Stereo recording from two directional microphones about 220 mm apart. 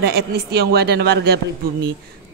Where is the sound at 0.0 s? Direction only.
45° right (ahead or behind).